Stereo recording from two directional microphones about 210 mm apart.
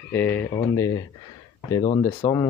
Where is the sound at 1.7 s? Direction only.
25° left (ahead or behind).